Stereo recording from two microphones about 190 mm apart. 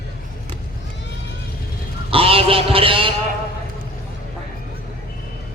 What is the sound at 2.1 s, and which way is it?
A man's voice, 30° right (ahead or behind).